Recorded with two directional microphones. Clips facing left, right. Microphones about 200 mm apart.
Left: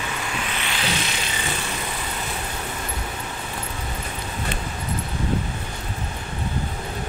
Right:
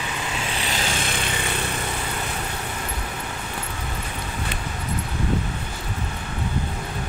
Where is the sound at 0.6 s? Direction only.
45° right (ahead or behind).